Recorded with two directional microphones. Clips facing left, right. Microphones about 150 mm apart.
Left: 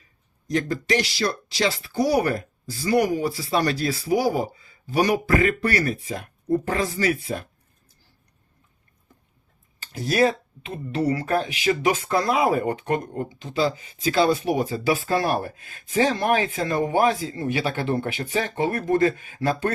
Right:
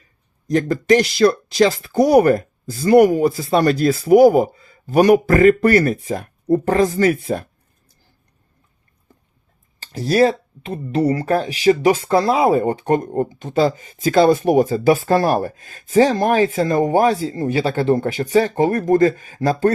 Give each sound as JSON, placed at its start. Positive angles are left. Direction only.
{"t": 0.4, "sound": "speech", "side_deg": -45}
{"t": 9.9, "sound": "speech", "side_deg": -35}